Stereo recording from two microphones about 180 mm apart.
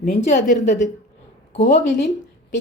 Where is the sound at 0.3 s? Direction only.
40° left (ahead or behind).